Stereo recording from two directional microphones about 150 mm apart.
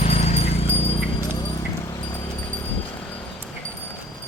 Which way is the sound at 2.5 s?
10° left (ahead or behind).